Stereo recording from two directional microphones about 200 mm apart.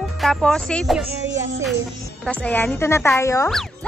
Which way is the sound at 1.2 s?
65° right (ahead or behind).